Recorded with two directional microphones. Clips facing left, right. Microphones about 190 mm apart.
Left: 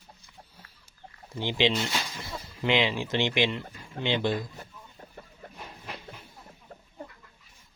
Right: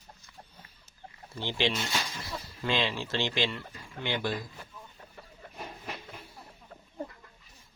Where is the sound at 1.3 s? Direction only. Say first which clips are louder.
Left 4 dB; 15° left (ahead or behind).